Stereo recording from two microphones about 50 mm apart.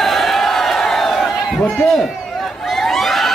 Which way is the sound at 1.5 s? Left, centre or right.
Centre.